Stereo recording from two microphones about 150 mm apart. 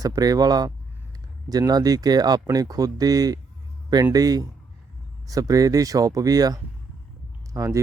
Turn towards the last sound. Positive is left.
turn(degrees=-20)  # may be behind; listen again after turning